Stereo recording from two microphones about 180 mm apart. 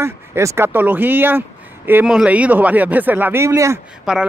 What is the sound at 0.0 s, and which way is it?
Speech, 15° right (ahead or behind).